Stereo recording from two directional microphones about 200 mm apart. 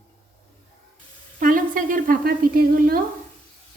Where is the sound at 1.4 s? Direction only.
45° right (ahead or behind).